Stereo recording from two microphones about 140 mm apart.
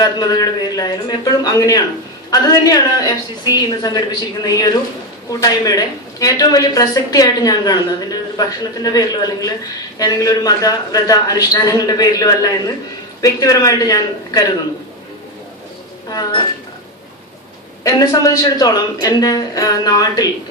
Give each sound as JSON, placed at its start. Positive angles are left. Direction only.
{"t": 0.0, "sound": "a woman's voice", "side_deg": 30}
{"t": 16.0, "sound": "a woman's voice", "side_deg": 30}
{"t": 17.8, "sound": "a woman's voice", "side_deg": 25}